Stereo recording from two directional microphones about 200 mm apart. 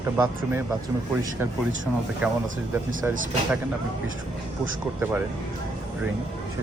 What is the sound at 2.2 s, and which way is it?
Speech, 5° right (ahead or behind).